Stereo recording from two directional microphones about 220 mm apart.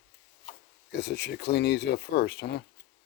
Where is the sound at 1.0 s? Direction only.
50° left (ahead or behind).